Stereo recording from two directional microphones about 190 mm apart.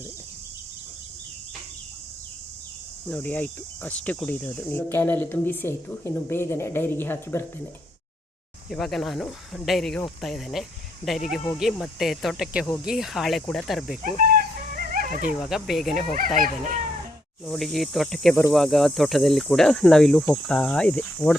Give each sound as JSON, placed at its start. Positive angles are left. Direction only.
{"t": 3.1, "sound": "speech", "side_deg": 10}
{"t": 8.7, "sound": "speech", "side_deg": 0}
{"t": 14.0, "sound": "dog", "side_deg": -50}
{"t": 15.3, "sound": "speech", "side_deg": 0}
{"t": 16.4, "sound": "speech", "side_deg": -45}
{"t": 17.4, "sound": "speech", "side_deg": 0}